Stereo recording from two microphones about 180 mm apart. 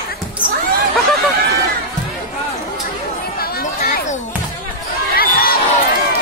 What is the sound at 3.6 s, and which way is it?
Chatter, 45° left (ahead or behind).